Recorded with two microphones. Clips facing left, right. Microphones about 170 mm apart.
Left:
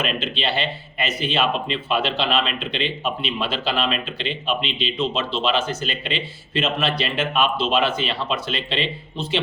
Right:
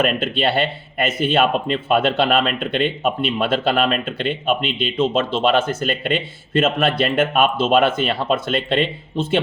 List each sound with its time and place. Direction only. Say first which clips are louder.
0.0 s speech: right 6 dB; 50° right (ahead or behind)